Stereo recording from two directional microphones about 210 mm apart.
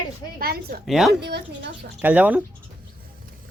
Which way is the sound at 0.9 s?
Centre (ahead or behind).